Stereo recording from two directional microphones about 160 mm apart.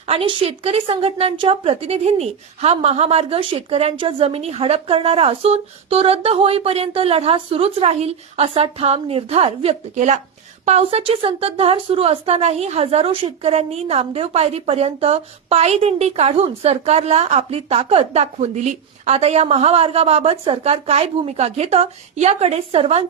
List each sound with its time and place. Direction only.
0.1 s a woman's voice: 35° right (ahead or behind)